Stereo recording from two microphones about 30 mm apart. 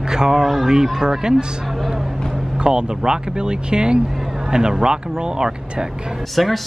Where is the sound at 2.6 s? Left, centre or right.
Right.